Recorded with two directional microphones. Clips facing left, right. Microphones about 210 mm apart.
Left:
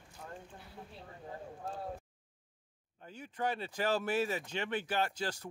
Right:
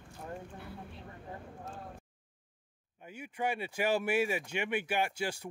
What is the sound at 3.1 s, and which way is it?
Speech, 10° right (ahead or behind).